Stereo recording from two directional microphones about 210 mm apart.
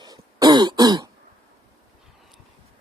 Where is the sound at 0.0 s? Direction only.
20° right (ahead or behind).